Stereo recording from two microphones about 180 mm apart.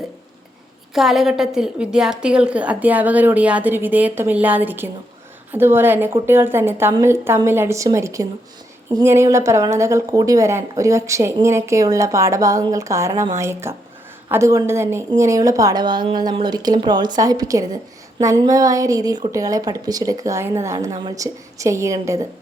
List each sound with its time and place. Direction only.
0.9 s a woman's voice: centre (ahead or behind); by 22.3 s 15° right (ahead or behind)